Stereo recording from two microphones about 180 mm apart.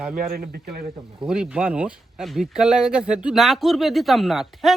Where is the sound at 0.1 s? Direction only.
55° right (ahead or behind).